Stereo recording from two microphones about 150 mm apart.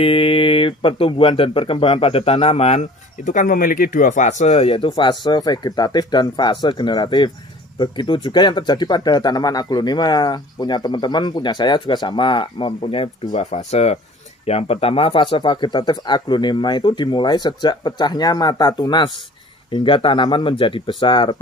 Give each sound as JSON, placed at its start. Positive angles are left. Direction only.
{"t": 0.0, "sound": "speech", "side_deg": 35}
{"t": 3.3, "sound": "speech", "side_deg": 60}
{"t": 13.3, "sound": "speech", "side_deg": 50}